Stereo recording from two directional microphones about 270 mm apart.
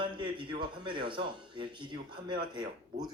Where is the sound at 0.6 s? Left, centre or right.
Centre.